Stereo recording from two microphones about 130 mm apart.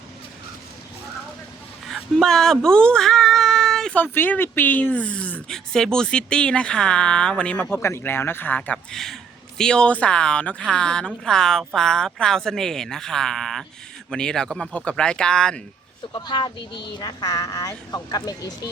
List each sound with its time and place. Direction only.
2.1 s speech: 5° left (ahead or behind)
7.8 s a woman's voice: 20° left (ahead or behind)
16.1 s speech: 35° left (ahead or behind)